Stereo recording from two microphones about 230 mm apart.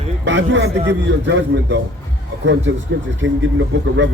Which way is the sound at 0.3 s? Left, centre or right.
Right.